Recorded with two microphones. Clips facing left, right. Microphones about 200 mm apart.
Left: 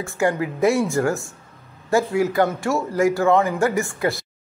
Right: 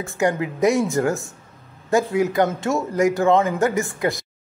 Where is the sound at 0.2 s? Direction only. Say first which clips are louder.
Even; 20° right (ahead or behind).